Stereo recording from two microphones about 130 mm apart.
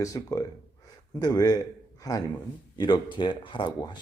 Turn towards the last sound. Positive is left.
turn(degrees=35)  # may be behind; listen again after turning